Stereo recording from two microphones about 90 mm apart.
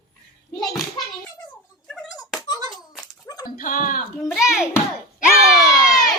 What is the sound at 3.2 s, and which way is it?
Dog, 45° left (ahead or behind).